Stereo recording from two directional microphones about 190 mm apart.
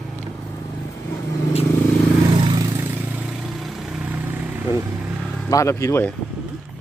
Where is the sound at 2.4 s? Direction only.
20° right (ahead or behind).